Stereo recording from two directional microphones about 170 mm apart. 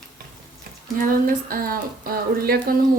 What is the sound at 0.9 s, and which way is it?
A woman's voice, 55° right (ahead or behind).